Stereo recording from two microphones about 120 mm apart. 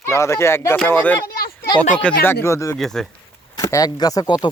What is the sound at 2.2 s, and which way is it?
Speech, 25° left (ahead or behind).